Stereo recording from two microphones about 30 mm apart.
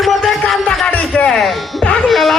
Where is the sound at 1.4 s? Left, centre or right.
Centre.